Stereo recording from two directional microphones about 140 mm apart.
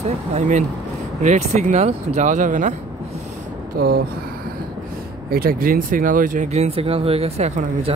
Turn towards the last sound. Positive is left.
turn(degrees=-55)  # may be behind; listen again after turning